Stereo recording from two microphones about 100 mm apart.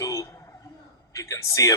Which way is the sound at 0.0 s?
35° left (ahead or behind).